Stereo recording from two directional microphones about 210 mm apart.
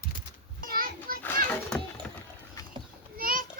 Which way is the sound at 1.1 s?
40° right (ahead or behind).